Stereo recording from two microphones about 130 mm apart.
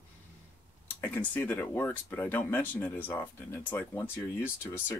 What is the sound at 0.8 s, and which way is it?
Speech, 15° left (ahead or behind).